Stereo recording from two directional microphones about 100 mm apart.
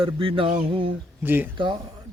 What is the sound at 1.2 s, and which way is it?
Speech, 20° right (ahead or behind).